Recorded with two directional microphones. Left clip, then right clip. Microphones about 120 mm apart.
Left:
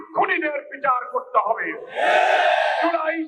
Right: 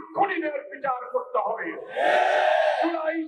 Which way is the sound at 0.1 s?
35° left (ahead or behind).